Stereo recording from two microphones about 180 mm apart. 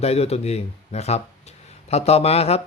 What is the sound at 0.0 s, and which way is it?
Speech, 35° left (ahead or behind).